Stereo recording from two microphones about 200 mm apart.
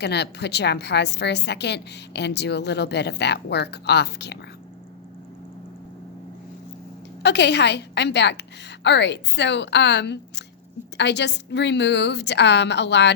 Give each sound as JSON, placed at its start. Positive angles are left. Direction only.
{"t": 0.0, "sound": "a woman's voice", "side_deg": 55}
{"t": 7.2, "sound": "a woman's voice", "side_deg": 55}